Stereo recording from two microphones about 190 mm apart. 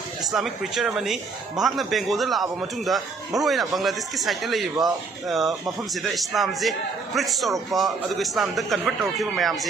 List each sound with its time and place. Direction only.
0.3 s speech: centre (ahead or behind)